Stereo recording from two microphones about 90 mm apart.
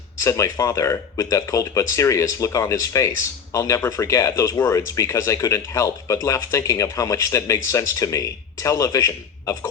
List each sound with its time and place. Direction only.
0.2 s speech: 35° left (ahead or behind)